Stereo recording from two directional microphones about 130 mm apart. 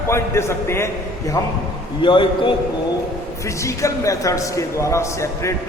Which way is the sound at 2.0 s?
40° left (ahead or behind).